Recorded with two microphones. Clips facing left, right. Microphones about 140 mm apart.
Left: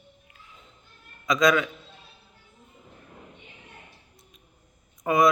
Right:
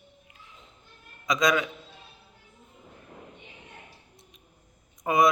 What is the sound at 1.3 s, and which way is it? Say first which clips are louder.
Speech: left 3 dB; 20° right (ahead or behind).